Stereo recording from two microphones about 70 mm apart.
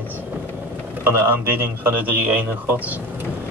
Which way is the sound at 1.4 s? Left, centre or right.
Right.